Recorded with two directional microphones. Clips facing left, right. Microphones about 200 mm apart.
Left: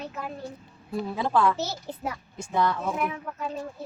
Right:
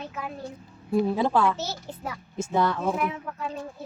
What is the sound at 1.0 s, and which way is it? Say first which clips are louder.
Speech: right 3 dB; 20° right (ahead or behind).